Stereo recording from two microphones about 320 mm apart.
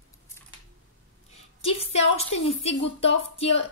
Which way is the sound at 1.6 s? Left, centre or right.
Centre.